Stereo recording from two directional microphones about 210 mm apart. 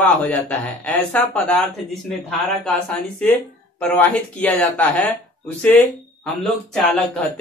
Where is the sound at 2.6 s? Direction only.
5° left (ahead or behind).